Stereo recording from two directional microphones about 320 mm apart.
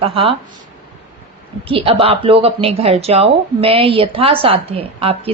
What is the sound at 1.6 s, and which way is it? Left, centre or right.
A woman's voice, centre.